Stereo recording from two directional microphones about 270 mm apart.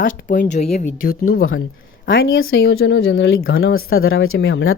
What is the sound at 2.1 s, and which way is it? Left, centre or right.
Speech, left.